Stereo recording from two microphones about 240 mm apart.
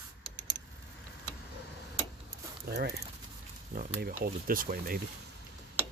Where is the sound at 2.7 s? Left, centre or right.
Right.